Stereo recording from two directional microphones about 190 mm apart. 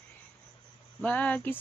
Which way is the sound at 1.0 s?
5° left (ahead or behind).